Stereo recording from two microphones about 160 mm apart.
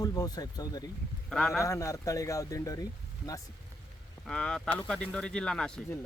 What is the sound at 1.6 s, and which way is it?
Speech, 20° left (ahead or behind).